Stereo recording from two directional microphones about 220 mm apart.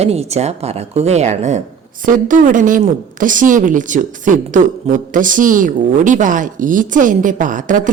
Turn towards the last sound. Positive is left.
turn(degrees=-35)  # may be behind; listen again after turning